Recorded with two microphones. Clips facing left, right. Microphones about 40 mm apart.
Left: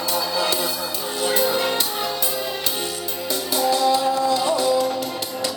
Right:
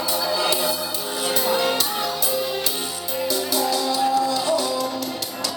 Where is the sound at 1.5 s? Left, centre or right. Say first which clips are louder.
Right 1 dB; centre.